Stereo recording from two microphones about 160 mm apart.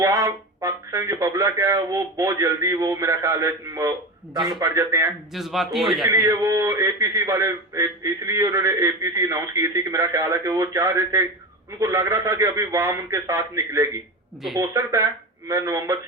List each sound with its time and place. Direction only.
0.0 s speech: 20° right (ahead or behind)
5.3 s a man's voice: centre (ahead or behind)
6.1 s speech: 20° right (ahead or behind)